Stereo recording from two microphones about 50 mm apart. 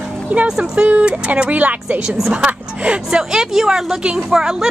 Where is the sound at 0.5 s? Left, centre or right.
Centre.